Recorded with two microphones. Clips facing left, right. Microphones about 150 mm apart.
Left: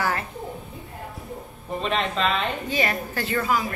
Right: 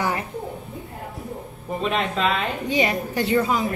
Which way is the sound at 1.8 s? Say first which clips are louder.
Right 1 dB; 10° right (ahead or behind).